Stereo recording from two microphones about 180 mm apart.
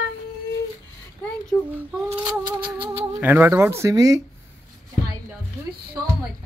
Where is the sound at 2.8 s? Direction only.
30° right (ahead or behind).